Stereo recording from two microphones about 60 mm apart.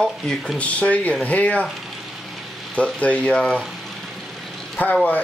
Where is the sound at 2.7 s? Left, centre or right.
Left.